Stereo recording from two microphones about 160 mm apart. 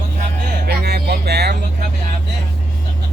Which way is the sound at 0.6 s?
90° right.